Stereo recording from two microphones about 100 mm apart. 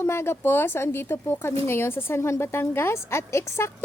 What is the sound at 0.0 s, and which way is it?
Speech, 25° left (ahead or behind).